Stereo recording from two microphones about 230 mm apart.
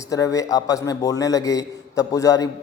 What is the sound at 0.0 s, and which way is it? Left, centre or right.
A man's voice, centre.